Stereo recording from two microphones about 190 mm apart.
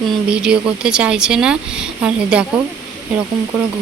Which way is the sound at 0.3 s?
5° right (ahead or behind).